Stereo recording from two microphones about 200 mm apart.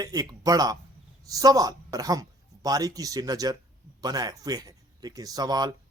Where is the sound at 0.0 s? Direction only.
20° right (ahead or behind).